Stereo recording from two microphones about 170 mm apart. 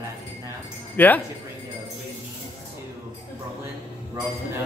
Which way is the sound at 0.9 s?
10° left (ahead or behind).